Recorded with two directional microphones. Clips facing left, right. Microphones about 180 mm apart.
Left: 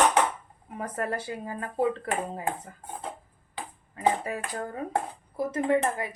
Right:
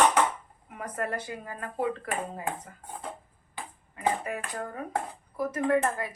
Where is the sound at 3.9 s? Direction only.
35° left (ahead or behind).